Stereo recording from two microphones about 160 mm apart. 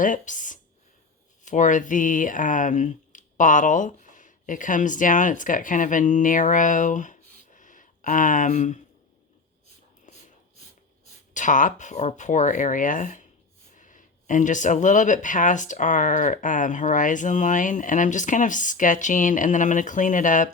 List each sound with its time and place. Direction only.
0.0 s speech: 55° left (ahead or behind)
11.3 s speech: 55° left (ahead or behind)